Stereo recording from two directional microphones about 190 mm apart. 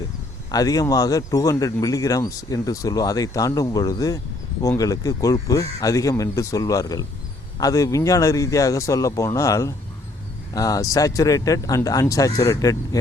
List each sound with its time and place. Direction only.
0.5 s speech: 20° left (ahead or behind)